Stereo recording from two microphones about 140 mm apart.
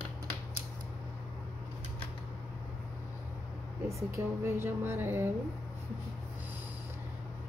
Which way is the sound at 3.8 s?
20° right (ahead or behind).